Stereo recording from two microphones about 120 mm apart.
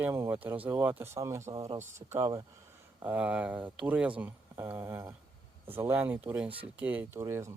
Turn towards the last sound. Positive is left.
turn(degrees=-25)  # may be behind; listen again after turning